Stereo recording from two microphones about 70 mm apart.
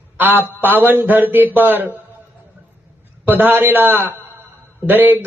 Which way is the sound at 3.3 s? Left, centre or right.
Right.